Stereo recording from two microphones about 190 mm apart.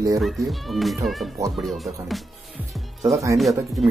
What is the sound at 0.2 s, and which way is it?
Speech, centre (ahead or behind).